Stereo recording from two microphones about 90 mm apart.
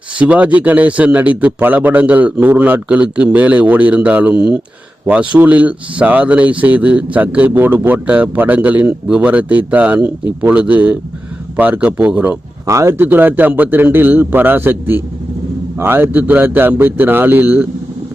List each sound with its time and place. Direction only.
0.2 s speech: 15° right (ahead or behind)
12.6 s a man's voice: 30° right (ahead or behind)